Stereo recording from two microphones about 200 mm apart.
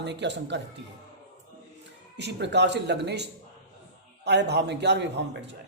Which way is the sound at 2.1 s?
60° right (ahead or behind).